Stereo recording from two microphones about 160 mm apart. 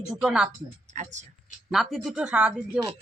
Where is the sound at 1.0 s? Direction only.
50° right (ahead or behind).